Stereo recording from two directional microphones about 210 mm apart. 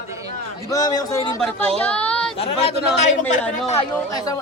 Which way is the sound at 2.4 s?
30° left (ahead or behind).